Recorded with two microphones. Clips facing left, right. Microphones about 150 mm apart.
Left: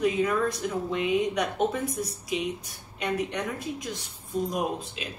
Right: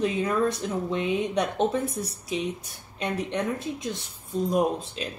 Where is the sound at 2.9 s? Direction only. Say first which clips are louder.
Right 1 dB; 30° right (ahead or behind).